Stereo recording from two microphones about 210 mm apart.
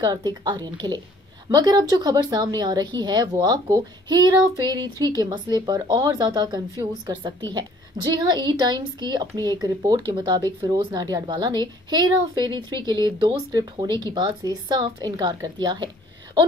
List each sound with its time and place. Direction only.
0.0 s a woman's voice: 20° right (ahead or behind)